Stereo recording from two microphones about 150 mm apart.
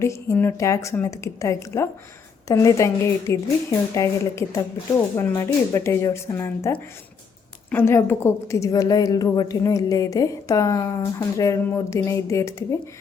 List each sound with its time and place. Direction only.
0.0 s a woman's voice: 20° left (ahead or behind)